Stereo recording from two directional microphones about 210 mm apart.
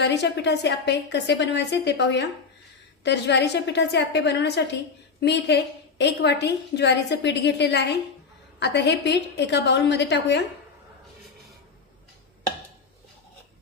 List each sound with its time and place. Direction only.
0.0 s a woman's voice: 55° left (ahead or behind)